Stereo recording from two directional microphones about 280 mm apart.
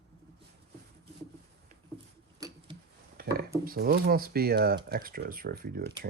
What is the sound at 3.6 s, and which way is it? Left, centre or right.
Speech, right.